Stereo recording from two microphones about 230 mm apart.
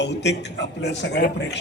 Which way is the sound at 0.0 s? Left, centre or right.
Left.